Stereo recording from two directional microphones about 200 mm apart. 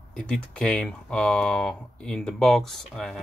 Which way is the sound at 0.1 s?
5° left (ahead or behind).